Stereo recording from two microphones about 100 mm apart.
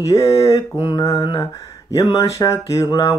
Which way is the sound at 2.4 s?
30° left (ahead or behind).